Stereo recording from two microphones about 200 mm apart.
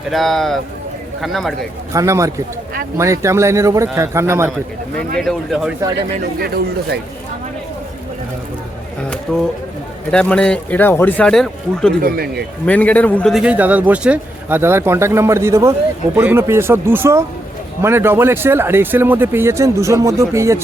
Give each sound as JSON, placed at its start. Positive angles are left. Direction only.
{"t": 0.1, "sound": "speech", "side_deg": 0}
{"t": 1.9, "sound": "a man's voice", "side_deg": -15}
{"t": 5.2, "sound": "speech", "side_deg": 0}
{"t": 9.3, "sound": "speech", "side_deg": 5}
{"t": 12.0, "sound": "speech", "side_deg": -50}
{"t": 12.6, "sound": "a man's voice", "side_deg": 5}